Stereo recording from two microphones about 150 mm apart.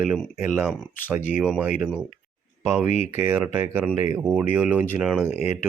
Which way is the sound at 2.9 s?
45° left (ahead or behind).